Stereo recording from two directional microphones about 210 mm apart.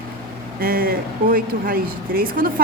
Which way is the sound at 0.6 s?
45° right (ahead or behind).